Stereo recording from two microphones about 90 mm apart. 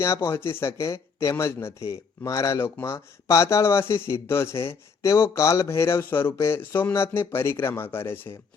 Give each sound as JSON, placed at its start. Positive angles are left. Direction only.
{"t": 0.0, "sound": "speech", "side_deg": 35}